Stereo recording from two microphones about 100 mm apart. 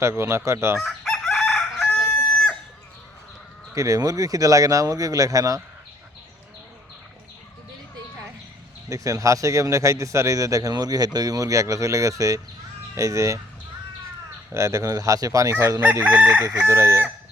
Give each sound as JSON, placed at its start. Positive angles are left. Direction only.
{"t": 0.0, "sound": "fowl", "side_deg": -25}
{"t": 0.8, "sound": "chicken", "side_deg": 5}
{"t": 3.8, "sound": "a man's voice", "side_deg": -35}
{"t": 8.9, "sound": "a man's voice", "side_deg": -35}
{"t": 14.5, "sound": "a man's voice", "side_deg": -30}
{"t": 16.0, "sound": "chicken", "side_deg": -15}
{"t": 16.6, "sound": "fowl", "side_deg": -30}